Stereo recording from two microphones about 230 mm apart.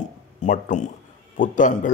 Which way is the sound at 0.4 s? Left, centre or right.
Left.